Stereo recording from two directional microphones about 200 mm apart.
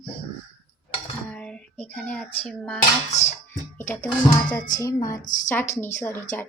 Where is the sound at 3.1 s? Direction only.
35° left (ahead or behind).